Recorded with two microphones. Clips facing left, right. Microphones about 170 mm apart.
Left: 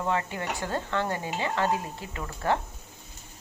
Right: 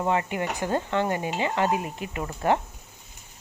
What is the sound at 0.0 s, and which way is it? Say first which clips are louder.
Speech: right 4 dB; 15° right (ahead or behind).